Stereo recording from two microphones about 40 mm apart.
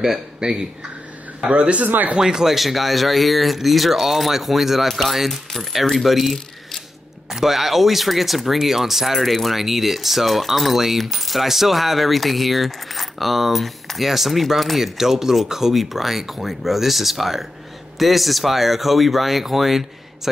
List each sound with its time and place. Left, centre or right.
0.4 s a man's voice: right
2.1 s speech: centre